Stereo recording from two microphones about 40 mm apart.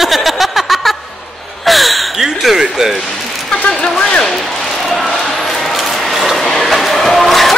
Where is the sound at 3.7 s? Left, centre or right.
Left.